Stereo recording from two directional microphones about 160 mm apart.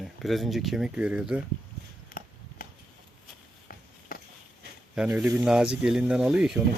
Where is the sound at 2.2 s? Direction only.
60° left (ahead or behind).